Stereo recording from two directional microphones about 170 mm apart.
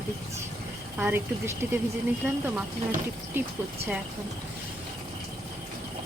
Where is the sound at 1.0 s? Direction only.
10° right (ahead or behind).